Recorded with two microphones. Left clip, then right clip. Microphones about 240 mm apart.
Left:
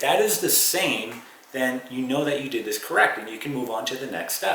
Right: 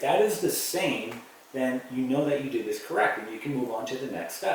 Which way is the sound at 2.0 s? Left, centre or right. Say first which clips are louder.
Left 2 dB; centre.